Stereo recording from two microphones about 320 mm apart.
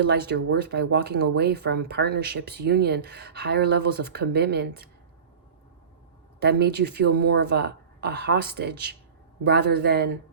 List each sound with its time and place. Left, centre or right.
0.0 s speech: right
6.4 s speech: right